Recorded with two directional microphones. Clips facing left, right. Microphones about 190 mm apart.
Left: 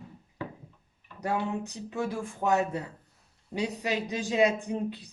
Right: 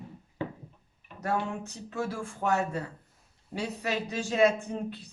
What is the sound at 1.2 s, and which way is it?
Speech, 15° left (ahead or behind).